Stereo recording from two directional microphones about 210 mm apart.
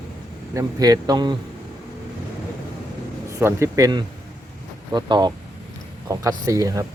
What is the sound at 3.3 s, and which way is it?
Speech, 15° right (ahead or behind).